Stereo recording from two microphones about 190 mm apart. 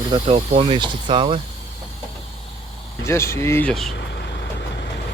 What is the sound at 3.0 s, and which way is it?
Speech, 15° left (ahead or behind).